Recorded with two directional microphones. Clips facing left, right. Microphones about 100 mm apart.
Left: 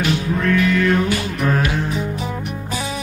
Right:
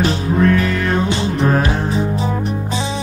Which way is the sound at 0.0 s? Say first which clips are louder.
Right 4 dB; 35° right (ahead or behind).